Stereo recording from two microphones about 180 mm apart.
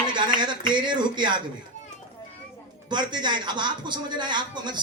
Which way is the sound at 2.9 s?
25° right (ahead or behind).